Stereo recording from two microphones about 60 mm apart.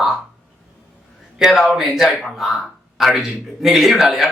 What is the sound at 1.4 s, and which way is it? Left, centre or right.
Speech, centre.